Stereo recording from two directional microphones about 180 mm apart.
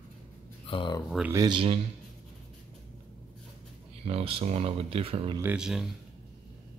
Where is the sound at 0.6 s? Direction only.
30° left (ahead or behind).